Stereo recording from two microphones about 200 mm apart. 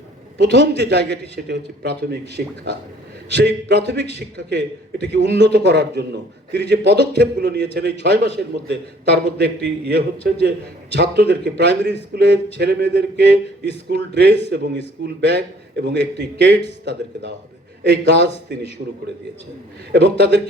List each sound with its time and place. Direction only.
0.3 s a man's voice: 60° right (ahead or behind)
19.9 s a man's voice: 55° right (ahead or behind)